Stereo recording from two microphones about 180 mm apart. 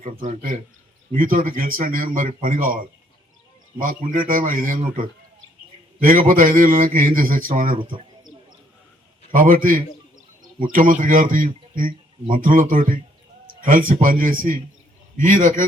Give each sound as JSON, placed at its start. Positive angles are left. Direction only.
{"t": 0.0, "sound": "a man's voice", "side_deg": -50}
{"t": 3.8, "sound": "a man's voice", "side_deg": -50}
{"t": 6.0, "sound": "a man's voice", "side_deg": -50}
{"t": 7.8, "sound": "speech", "side_deg": -30}
{"t": 9.3, "sound": "a man's voice", "side_deg": -50}